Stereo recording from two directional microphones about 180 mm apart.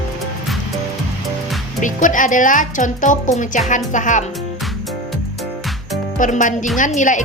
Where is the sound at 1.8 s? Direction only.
45° left (ahead or behind).